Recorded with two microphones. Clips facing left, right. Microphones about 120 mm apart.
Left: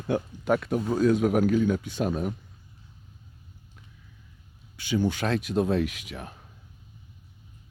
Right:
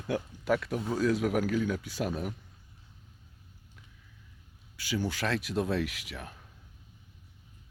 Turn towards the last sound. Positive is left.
turn(degrees=20)  # may be behind; listen again after turning